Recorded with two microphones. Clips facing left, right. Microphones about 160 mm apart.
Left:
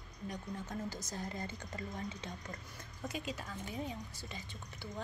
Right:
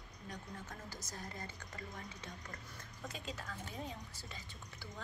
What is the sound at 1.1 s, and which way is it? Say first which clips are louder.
A woman's voice: left 6 dB; 25° left (ahead or behind).